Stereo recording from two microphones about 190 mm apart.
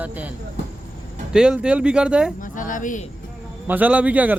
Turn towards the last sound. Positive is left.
turn(degrees=-10)  # may be behind; listen again after turning